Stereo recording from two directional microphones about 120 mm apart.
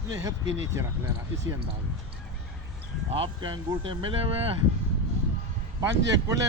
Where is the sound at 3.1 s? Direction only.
45° right (ahead or behind).